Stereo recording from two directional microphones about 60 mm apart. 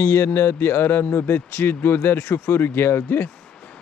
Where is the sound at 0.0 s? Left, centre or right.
Left.